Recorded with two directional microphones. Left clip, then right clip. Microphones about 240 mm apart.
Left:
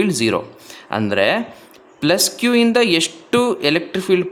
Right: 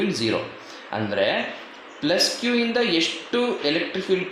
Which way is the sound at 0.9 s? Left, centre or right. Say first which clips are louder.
Left 6 dB; left.